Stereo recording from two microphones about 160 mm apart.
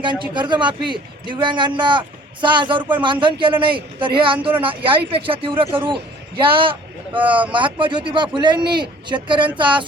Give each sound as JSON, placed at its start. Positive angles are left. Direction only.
{"t": 0.0, "sound": "a man's voice", "side_deg": -30}